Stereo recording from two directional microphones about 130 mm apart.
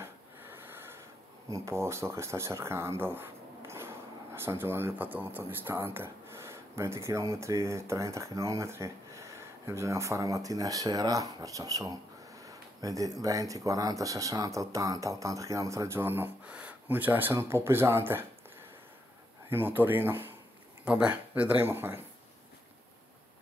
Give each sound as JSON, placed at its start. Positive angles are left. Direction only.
{"t": 0.0, "sound": "a sound", "side_deg": -15}
{"t": 1.5, "sound": "speech", "side_deg": -25}
{"t": 19.5, "sound": "speech", "side_deg": -15}